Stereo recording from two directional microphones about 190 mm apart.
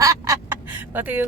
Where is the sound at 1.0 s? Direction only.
10° right (ahead or behind).